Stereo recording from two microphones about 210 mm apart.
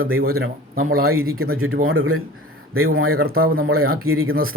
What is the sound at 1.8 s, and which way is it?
Speech, 75° right (ahead or behind).